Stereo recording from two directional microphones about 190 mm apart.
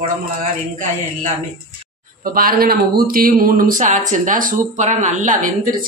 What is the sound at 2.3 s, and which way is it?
Speech, 50° right (ahead or behind).